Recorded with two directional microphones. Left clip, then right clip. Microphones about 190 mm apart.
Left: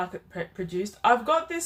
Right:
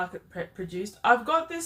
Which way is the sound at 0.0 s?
20° left (ahead or behind).